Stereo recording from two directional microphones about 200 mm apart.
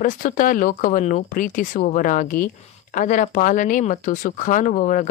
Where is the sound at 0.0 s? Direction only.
40° left (ahead or behind).